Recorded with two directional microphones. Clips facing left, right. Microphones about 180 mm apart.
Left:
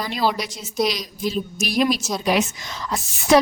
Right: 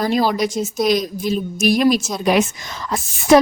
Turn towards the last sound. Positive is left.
turn(degrees=-50)  # may be behind; listen again after turning